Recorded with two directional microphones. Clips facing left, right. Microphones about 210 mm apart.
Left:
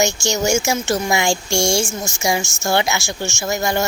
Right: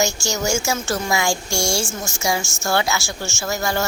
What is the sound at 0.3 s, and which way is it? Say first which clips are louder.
Speech: left 4 dB; 20° left (ahead or behind).